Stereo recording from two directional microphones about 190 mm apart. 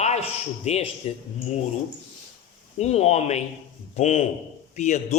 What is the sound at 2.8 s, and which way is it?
Speech, 35° left (ahead or behind).